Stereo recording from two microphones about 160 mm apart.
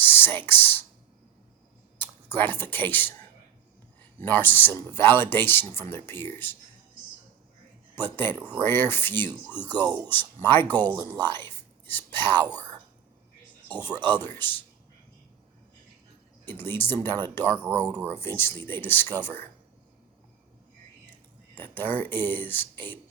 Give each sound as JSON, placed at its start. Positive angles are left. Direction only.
{"t": 0.0, "sound": "a sound", "side_deg": 15}
{"t": 2.0, "sound": "speech", "side_deg": 10}
{"t": 4.2, "sound": "speech", "side_deg": 10}
{"t": 7.9, "sound": "speech", "side_deg": 15}
{"t": 9.7, "sound": "speech", "side_deg": -25}
{"t": 10.1, "sound": "speech", "side_deg": 10}
{"t": 11.3, "sound": "whispering", "side_deg": 15}
{"t": 12.4, "sound": "speech", "side_deg": -25}
{"t": 13.8, "sound": "speech", "side_deg": 10}
{"t": 16.5, "sound": "speech", "side_deg": 15}
{"t": 21.5, "sound": "speech", "side_deg": 10}